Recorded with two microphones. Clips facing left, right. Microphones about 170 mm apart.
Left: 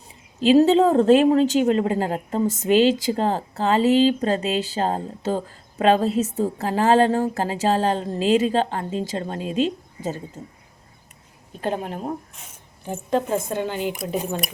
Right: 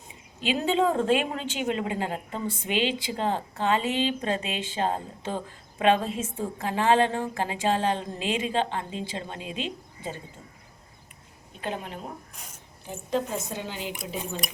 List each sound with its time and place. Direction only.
0.1 s a woman's voice: 35° left (ahead or behind)
11.6 s a woman's voice: 45° left (ahead or behind)